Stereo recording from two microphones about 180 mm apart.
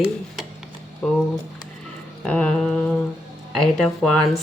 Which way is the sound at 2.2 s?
5° left (ahead or behind).